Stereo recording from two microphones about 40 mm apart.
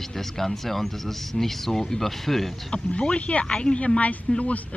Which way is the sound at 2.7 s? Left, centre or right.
Left.